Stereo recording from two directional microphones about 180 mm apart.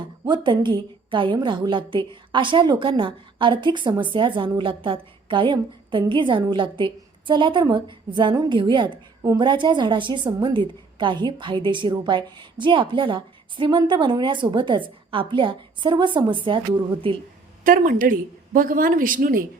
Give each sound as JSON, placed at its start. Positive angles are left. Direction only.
{"t": 0.3, "sound": "a woman's voice", "side_deg": -25}
{"t": 17.6, "sound": "a woman's voice", "side_deg": -50}